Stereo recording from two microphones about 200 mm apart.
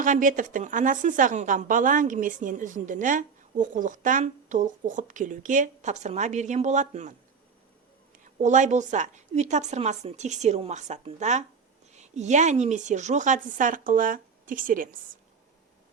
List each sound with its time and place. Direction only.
0.0 s a woman's voice: 40° right (ahead or behind)